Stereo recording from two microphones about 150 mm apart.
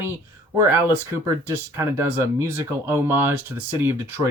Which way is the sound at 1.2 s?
15° right (ahead or behind).